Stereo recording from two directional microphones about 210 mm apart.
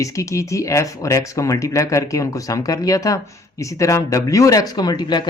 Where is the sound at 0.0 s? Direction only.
15° left (ahead or behind).